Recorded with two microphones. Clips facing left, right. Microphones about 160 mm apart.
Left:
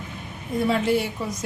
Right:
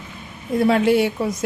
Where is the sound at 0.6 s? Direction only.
70° right (ahead or behind).